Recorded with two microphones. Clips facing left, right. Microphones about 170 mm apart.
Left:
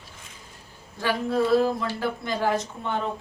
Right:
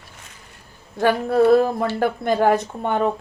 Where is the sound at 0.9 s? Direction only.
55° right (ahead or behind).